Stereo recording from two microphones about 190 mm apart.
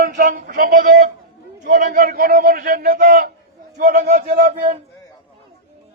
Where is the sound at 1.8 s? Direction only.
45° right (ahead or behind).